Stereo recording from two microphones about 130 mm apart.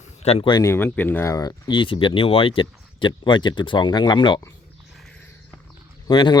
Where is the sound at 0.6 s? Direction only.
20° left (ahead or behind); by 4.4 s 35° left (ahead or behind).